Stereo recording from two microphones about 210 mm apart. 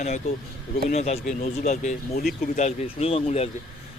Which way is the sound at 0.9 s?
30° left (ahead or behind).